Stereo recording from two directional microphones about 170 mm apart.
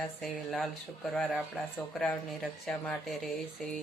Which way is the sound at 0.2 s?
Centre (ahead or behind).